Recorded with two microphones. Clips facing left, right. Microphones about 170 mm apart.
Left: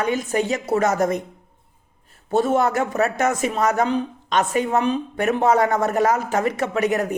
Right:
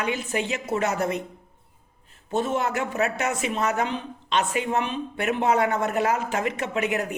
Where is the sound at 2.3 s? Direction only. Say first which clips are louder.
Left 6 dB; 40° left (ahead or behind).